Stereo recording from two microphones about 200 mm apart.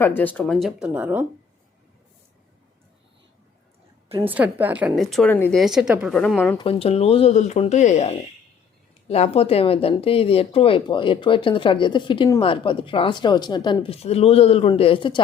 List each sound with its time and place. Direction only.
0.0 s speech: 10° left (ahead or behind); by 1.2 s 10° right (ahead or behind)
4.2 s speech: 10° right (ahead or behind)
6.6 s speech: 30° left (ahead or behind)